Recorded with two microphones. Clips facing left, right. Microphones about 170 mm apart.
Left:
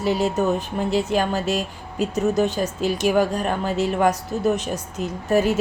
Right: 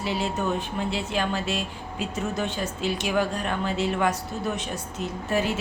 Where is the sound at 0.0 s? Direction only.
45° left (ahead or behind).